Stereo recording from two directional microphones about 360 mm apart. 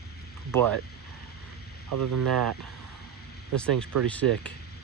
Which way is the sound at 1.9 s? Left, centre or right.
Right.